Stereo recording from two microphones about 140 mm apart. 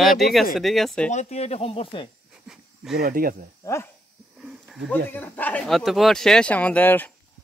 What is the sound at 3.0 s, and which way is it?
Speech, 90° right.